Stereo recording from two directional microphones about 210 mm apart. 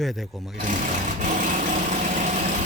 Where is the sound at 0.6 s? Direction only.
35° right (ahead or behind).